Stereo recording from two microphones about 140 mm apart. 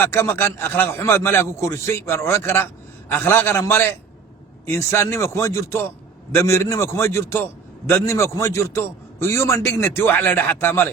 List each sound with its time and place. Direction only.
0.0 s a man's voice: 15° left (ahead or behind)